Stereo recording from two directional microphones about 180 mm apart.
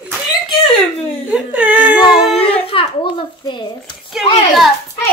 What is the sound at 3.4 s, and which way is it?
Speech, 25° left (ahead or behind).